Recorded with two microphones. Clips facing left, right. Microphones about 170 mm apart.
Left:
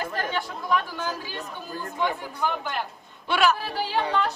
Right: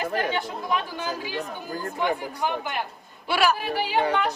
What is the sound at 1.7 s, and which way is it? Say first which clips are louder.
Speech: right 3 dB; 45° right (ahead or behind).